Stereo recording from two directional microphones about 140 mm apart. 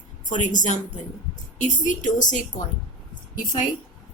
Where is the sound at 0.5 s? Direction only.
60° left (ahead or behind).